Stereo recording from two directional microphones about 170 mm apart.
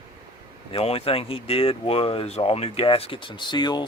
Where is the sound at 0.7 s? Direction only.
35° left (ahead or behind).